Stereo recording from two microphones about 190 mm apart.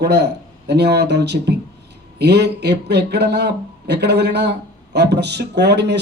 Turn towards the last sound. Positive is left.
turn(degrees=-60)  # may be behind; listen again after turning